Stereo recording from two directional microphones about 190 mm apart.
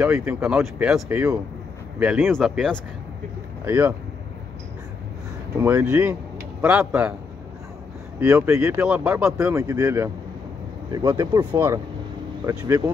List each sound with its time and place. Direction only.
0.0 s speech: 10° right (ahead or behind)
1.0 s speech: 15° right (ahead or behind); by 2.8 s centre (ahead or behind)
3.6 s speech: 10° right (ahead or behind)
5.6 s speech: 10° right (ahead or behind)
8.2 s speech: 10° right (ahead or behind)